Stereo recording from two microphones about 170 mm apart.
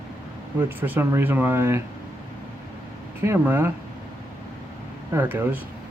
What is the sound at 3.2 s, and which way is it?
Speech, 15° right (ahead or behind).